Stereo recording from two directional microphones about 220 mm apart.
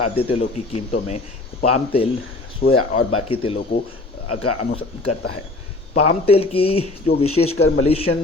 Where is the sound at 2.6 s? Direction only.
45° left (ahead or behind).